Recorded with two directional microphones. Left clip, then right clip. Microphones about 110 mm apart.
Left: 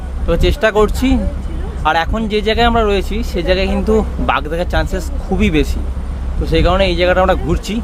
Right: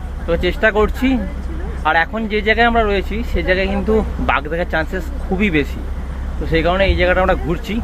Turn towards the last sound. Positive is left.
turn(degrees=15)  # may be behind; listen again after turning